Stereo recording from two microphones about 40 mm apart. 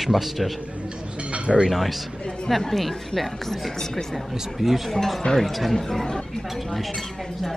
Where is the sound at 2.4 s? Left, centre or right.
Centre.